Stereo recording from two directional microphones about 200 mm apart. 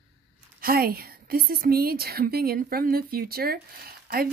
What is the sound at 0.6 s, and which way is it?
A woman's voice, 45° right (ahead or behind).